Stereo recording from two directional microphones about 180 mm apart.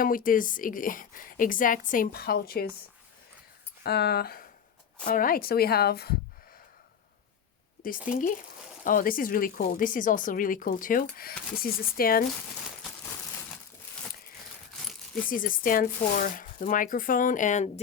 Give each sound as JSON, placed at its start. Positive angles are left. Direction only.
{"t": 0.0, "sound": "speech", "side_deg": 50}
{"t": 3.8, "sound": "a woman's voice", "side_deg": 65}
{"t": 8.8, "sound": "speech", "side_deg": 50}
{"t": 14.8, "sound": "coin", "side_deg": 0}
{"t": 15.3, "sound": "speech", "side_deg": 50}